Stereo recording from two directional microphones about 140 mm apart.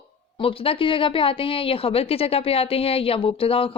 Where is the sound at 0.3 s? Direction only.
40° left (ahead or behind).